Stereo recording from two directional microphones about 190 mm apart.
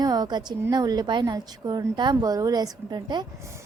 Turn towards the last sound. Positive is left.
turn(degrees=-25)  # may be behind; listen again after turning